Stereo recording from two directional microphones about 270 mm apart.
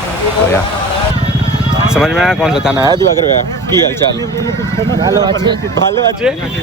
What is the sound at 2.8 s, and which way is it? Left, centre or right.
Speech, centre.